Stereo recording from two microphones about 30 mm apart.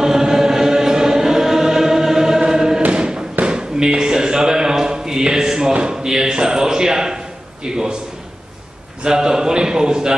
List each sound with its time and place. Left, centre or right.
0.0 s choir: centre
2.9 s thump: right
3.4 s a sound: right
9.0 s a man's voice: right